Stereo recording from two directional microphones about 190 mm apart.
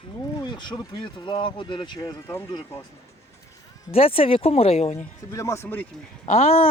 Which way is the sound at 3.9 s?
30° left (ahead or behind).